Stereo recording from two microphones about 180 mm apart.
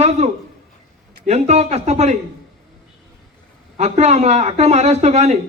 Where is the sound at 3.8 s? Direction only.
40° right (ahead or behind).